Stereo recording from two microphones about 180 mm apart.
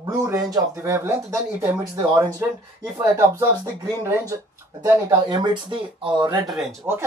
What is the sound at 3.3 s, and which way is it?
Speech, 15° right (ahead or behind).